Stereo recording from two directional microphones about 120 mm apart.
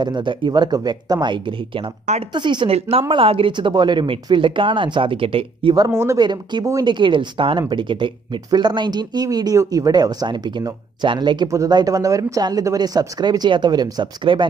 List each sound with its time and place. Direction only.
0.0 s speech: 40° right (ahead or behind)
2.7 s speech: 50° right (ahead or behind)
5.9 s speech: 20° right (ahead or behind)
6.1 s speech: 40° right (ahead or behind)